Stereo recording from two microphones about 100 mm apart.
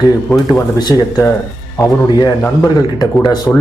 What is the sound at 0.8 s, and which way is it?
Speech, 40° left (ahead or behind).